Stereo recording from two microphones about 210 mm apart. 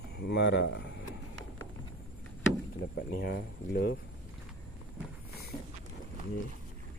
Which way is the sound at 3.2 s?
45° left (ahead or behind).